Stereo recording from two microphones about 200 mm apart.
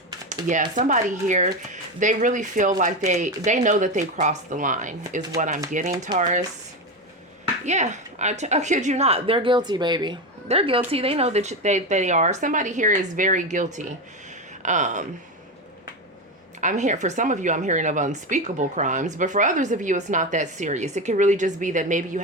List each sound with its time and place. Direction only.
0.3 s a woman's voice: 40° right (ahead or behind)
7.6 s a woman's voice: 35° right (ahead or behind)
16.6 s a woman's voice: 35° right (ahead or behind)